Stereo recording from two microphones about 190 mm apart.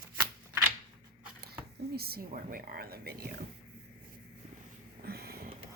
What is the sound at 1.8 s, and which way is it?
Speech, 55° right (ahead or behind).